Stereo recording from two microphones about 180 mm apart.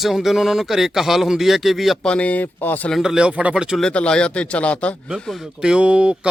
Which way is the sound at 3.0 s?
5° right (ahead or behind).